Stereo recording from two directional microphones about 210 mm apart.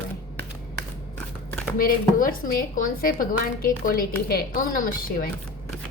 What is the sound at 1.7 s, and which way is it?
Speech, 40° left (ahead or behind).